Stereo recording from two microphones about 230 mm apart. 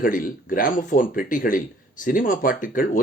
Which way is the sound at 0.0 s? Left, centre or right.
Left.